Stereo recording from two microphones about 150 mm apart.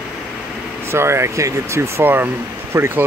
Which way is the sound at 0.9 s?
15° right (ahead or behind).